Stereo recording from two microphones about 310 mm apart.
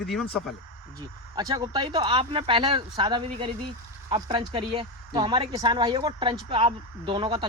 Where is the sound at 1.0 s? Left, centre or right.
Centre.